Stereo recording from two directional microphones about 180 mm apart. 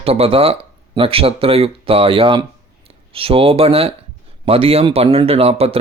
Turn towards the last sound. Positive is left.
turn(degrees=-35)  # may be behind; listen again after turning